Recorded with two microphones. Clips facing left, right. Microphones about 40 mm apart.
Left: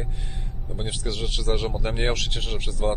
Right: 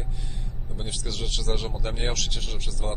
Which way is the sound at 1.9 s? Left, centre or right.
Left.